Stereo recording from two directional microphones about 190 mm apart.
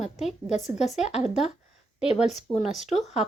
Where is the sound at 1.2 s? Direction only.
Centre (ahead or behind).